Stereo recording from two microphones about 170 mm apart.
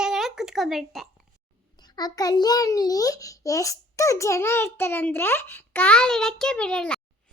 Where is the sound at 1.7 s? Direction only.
25° left (ahead or behind); by 7.0 s 5° left (ahead or behind).